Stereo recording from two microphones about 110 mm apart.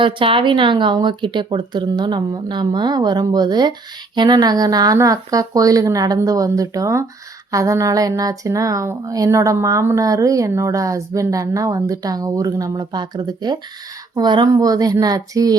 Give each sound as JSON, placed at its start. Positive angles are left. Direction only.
{"t": 0.0, "sound": "speech", "side_deg": -50}